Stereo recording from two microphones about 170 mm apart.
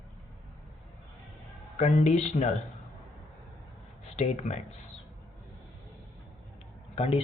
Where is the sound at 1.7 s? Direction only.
45° left (ahead or behind).